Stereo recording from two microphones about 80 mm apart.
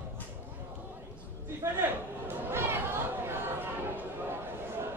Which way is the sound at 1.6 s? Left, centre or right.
Right.